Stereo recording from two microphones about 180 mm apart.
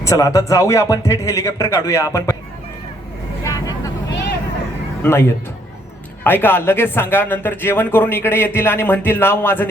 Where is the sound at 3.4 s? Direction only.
20° left (ahead or behind).